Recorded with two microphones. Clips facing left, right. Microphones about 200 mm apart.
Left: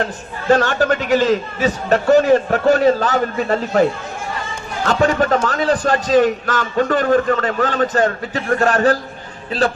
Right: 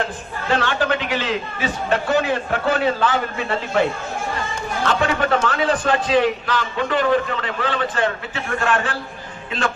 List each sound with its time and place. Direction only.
0.0 s a man's voice: 45° left (ahead or behind)
4.8 s a man's voice: 40° left (ahead or behind)